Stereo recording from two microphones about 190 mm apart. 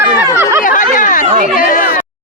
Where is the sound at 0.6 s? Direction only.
45° left (ahead or behind).